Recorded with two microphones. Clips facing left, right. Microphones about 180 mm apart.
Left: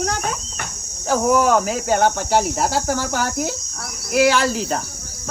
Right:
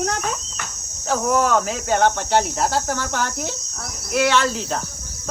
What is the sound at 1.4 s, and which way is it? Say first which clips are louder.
Speech: left 2 dB; 5° left (ahead or behind).